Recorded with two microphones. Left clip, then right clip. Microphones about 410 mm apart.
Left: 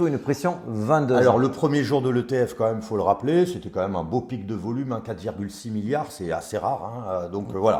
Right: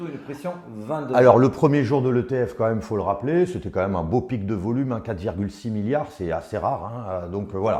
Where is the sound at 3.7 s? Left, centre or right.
Right.